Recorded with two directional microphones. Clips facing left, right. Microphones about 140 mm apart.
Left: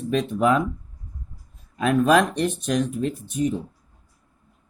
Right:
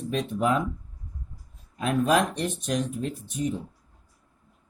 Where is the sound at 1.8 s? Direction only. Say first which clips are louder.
Left 5 dB; 80° left.